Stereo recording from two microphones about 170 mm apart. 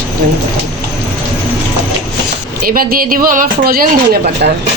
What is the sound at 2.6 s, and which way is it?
Speech, 60° right (ahead or behind).